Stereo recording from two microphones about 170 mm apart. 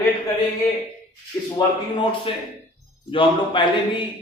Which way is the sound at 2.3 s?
30° left (ahead or behind).